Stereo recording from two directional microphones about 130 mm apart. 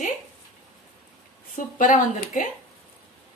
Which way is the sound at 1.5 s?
90° left.